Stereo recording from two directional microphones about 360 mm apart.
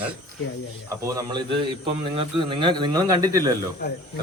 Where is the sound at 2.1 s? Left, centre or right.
Centre.